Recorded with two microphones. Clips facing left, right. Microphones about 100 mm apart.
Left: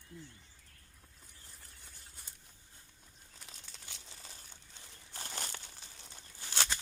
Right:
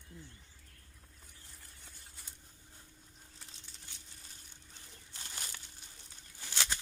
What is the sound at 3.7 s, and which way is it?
Crumpling, 90° left.